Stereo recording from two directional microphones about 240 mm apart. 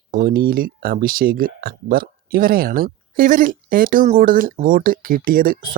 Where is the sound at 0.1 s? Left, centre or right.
Right.